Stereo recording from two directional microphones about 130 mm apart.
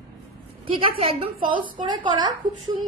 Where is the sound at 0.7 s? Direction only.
45° right (ahead or behind).